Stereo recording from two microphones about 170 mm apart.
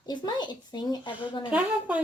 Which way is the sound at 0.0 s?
25° left (ahead or behind).